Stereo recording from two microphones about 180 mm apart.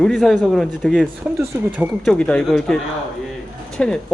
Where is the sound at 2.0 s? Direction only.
5° left (ahead or behind).